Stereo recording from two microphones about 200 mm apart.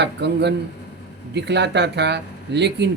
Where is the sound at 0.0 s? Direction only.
60° right (ahead or behind).